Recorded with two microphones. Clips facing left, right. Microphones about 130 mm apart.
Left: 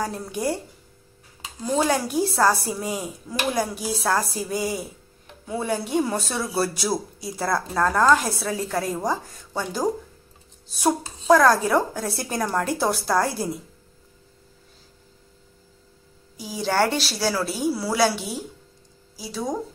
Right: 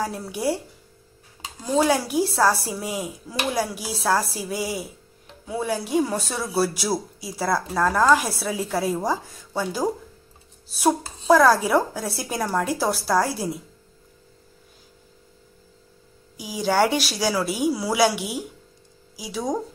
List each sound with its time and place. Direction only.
0.0 s a man's voice: 5° right (ahead or behind)
1.6 s a man's voice: centre (ahead or behind)
16.5 s a woman's voice: 5° right (ahead or behind)